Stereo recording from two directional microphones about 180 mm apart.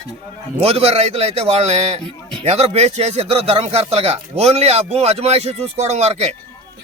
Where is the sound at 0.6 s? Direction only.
35° right (ahead or behind).